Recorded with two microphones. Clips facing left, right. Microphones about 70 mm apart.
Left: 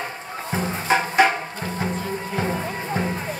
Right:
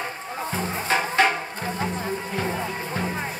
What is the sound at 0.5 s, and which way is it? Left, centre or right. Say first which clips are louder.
Music: left 4 dB; centre.